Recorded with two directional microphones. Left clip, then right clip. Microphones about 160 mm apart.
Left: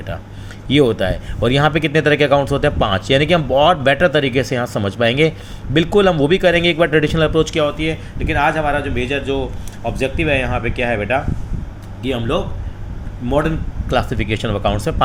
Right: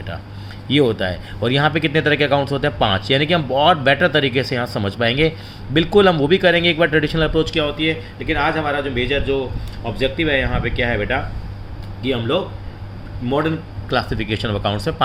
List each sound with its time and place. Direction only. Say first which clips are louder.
0.7 s speech: left 2 dB; 20° left (ahead or behind)